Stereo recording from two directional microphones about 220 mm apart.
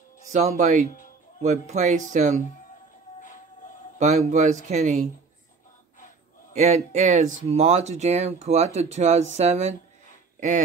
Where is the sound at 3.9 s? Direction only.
35° right (ahead or behind).